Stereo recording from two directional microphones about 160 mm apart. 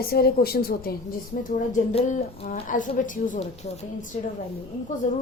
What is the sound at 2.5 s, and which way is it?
A woman's voice, 55° left (ahead or behind).